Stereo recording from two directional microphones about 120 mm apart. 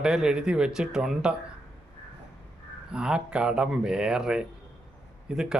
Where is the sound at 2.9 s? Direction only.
5° right (ahead or behind).